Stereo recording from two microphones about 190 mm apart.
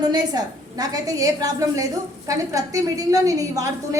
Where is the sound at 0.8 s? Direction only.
20° right (ahead or behind).